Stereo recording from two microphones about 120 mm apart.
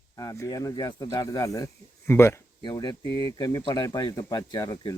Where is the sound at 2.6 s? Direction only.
35° left (ahead or behind).